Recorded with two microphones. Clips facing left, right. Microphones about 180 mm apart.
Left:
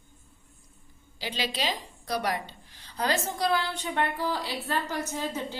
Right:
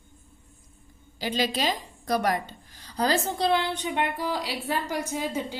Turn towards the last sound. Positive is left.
turn(degrees=-10)  # may be behind; listen again after turning